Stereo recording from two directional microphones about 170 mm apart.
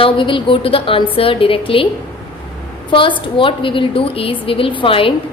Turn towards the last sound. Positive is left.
turn(degrees=30)  # may be behind; listen again after turning